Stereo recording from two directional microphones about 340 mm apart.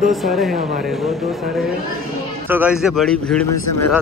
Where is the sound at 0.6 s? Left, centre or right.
Right.